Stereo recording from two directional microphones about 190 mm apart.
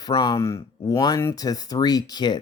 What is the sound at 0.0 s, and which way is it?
Speech, 20° left (ahead or behind).